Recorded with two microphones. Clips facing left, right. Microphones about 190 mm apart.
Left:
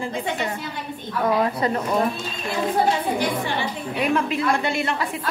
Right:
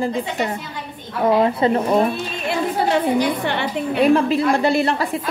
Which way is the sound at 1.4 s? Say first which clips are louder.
Right 5 dB; 25° right (ahead or behind).